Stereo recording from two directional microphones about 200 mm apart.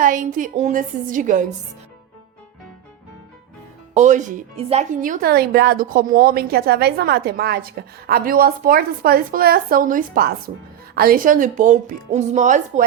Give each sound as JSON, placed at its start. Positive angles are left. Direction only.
{"t": 0.0, "sound": "speech", "side_deg": -40}
{"t": 3.9, "sound": "speech", "side_deg": -35}